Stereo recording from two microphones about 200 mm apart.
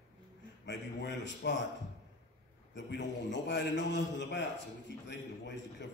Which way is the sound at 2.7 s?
60° left (ahead or behind).